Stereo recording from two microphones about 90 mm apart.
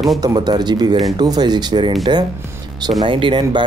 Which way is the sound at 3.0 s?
70° right (ahead or behind).